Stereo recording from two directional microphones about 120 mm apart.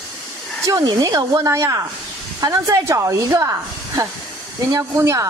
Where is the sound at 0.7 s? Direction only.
30° right (ahead or behind).